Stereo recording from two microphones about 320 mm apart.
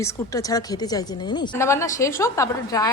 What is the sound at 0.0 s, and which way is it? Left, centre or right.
A woman's voice, centre.